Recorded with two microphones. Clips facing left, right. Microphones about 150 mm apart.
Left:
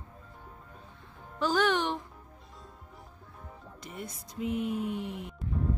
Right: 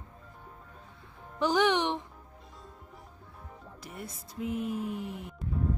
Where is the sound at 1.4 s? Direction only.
20° right (ahead or behind).